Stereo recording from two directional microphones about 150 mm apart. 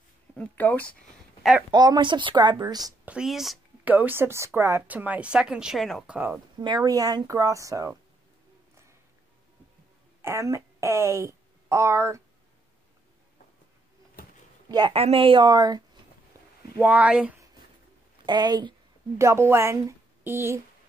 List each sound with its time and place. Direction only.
0.4 s speech: 10° left (ahead or behind)
1.7 s speech: 25° right (ahead or behind)
3.1 s speech: 5° right (ahead or behind)
3.8 s a woman's voice: 10° right (ahead or behind)
6.6 s speech: 25° right (ahead or behind)
10.2 s a woman's voice: 20° right (ahead or behind)
14.7 s a woman's voice: 30° right (ahead or behind)
16.3 s a sound: 20° right (ahead or behind)
16.8 s a woman's voice: 10° right (ahead or behind)
18.2 s speech: 30° right (ahead or behind)